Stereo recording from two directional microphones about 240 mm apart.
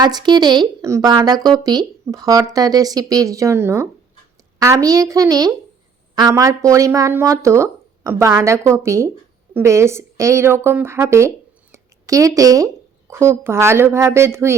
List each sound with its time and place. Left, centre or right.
0.0 s a woman's voice: centre